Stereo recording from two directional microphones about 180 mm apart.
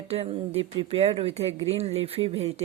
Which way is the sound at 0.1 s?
35° right (ahead or behind).